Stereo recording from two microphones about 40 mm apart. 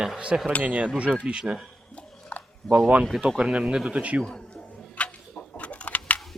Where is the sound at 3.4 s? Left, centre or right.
Right.